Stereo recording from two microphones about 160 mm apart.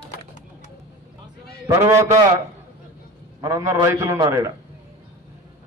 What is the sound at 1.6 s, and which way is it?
Speech, 20° right (ahead or behind).